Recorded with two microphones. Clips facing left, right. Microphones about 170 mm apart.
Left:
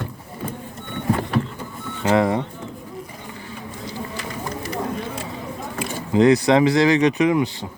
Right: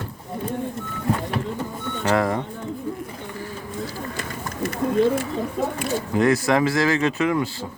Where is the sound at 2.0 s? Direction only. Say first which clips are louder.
Left 3 dB; 20° left (ahead or behind).